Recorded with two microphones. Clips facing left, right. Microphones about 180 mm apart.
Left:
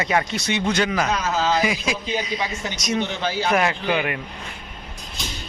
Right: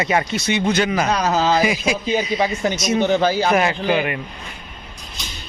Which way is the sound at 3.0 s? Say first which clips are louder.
Right 10 dB; 40° right (ahead or behind).